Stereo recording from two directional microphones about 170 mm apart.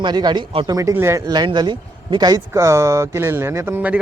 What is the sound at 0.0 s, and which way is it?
Speech, 25° right (ahead or behind).